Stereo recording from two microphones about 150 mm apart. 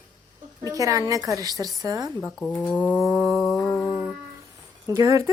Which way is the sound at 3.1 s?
20° right (ahead or behind).